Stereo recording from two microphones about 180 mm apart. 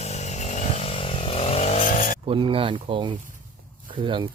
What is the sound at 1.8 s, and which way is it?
Vehicle, 50° left (ahead or behind).